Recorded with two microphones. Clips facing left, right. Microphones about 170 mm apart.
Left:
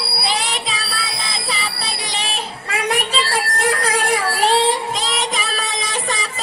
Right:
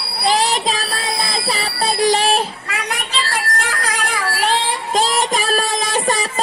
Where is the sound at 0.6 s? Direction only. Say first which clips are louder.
Right 6 dB; 40° right (ahead or behind).